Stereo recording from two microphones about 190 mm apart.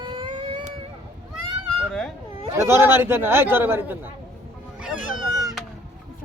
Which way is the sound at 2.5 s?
15° right (ahead or behind).